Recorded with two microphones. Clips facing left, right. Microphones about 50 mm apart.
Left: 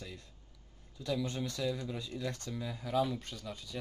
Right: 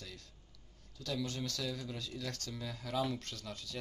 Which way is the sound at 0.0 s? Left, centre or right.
Left.